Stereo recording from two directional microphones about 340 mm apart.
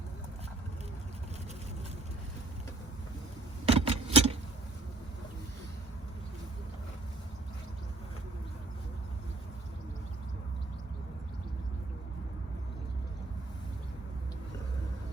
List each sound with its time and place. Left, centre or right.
3.7 s vehicle: centre